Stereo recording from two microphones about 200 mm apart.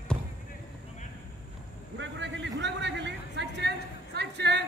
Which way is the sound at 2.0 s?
65° right (ahead or behind).